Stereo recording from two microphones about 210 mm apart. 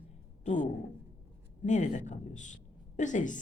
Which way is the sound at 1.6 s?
35° left (ahead or behind).